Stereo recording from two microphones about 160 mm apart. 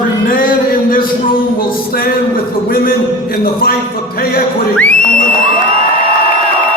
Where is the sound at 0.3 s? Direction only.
60° left (ahead or behind).